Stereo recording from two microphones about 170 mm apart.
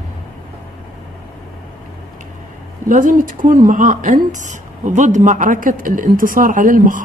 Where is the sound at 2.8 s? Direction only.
50° right (ahead or behind).